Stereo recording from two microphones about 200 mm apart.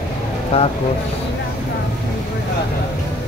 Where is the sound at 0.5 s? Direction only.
30° left (ahead or behind).